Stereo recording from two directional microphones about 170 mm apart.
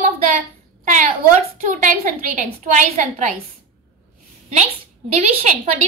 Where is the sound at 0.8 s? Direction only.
50° right (ahead or behind).